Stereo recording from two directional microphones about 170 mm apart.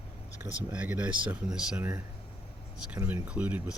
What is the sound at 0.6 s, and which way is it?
Speech, 5° right (ahead or behind).